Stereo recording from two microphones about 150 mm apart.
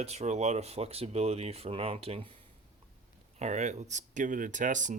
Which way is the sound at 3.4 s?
50° right (ahead or behind).